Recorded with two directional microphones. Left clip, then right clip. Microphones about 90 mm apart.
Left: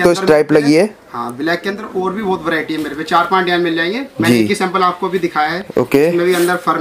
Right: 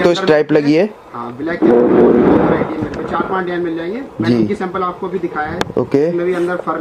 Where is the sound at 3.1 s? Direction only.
15° left (ahead or behind).